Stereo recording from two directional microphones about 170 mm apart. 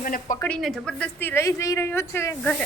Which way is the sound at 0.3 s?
10° left (ahead or behind).